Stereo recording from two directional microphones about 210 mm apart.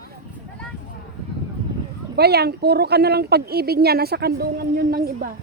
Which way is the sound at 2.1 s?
50° right (ahead or behind).